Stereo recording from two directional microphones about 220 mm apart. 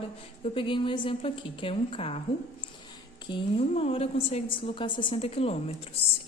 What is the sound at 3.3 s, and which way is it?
A woman's voice, 25° left (ahead or behind).